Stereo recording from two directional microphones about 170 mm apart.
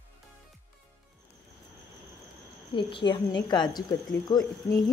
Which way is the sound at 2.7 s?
25° left (ahead or behind).